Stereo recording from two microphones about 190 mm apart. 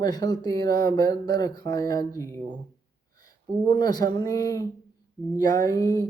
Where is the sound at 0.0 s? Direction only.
20° left (ahead or behind).